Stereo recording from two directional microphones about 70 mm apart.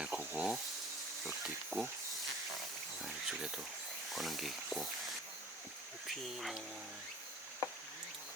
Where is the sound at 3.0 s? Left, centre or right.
Centre.